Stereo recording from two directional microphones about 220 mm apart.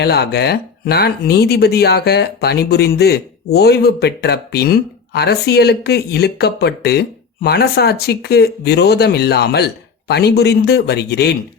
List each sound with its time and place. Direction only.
0.0 s speech: 50° left (ahead or behind)